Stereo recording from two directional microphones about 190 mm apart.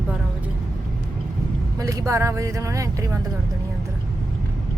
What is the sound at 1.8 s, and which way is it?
Speech, 15° right (ahead or behind).